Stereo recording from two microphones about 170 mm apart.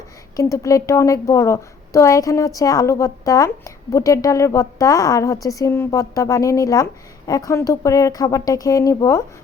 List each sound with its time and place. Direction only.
0.3 s a woman's voice: 20° left (ahead or behind)